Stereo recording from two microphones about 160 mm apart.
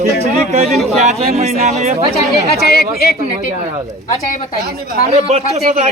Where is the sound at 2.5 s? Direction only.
80° left.